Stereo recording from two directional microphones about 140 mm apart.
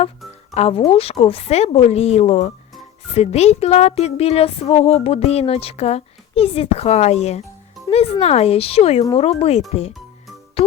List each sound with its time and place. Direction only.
0.5 s speech: 50° left (ahead or behind)